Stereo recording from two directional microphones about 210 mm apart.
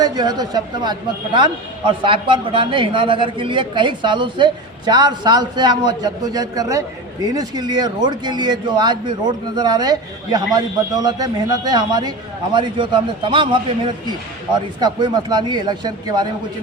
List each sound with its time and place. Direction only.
0.0 s a man's voice: 20° right (ahead or behind)
14.8 s a man's voice: 20° right (ahead or behind)